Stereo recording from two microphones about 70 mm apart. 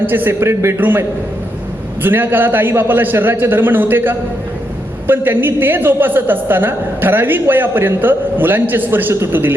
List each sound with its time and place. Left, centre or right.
0.0 s a man's voice: right
0.8 s a woman's voice: right